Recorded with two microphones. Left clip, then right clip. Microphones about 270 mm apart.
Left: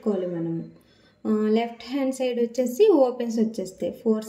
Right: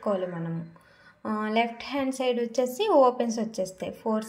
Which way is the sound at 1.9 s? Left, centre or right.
Right.